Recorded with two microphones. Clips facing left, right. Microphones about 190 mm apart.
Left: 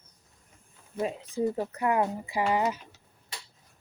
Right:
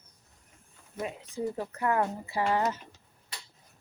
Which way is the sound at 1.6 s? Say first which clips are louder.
Right 2 dB; 20° left (ahead or behind).